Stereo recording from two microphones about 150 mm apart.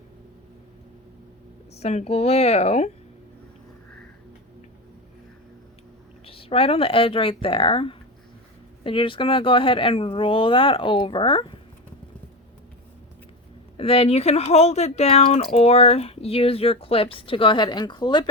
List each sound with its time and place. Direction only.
1.8 s speech: 45° left (ahead or behind)
6.2 s speech: 40° left (ahead or behind)
13.7 s speech: 40° left (ahead or behind)